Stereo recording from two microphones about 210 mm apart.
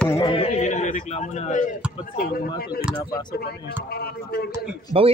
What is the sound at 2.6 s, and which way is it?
Speech, 45° left (ahead or behind).